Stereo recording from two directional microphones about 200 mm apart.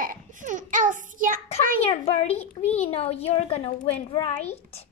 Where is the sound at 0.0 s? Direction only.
40° right (ahead or behind).